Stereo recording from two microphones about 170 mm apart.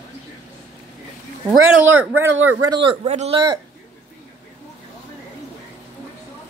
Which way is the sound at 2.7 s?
30° right (ahead or behind).